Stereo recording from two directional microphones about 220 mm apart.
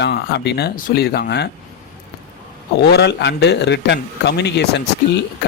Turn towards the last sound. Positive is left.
turn(degrees=50)  # may be behind; listen again after turning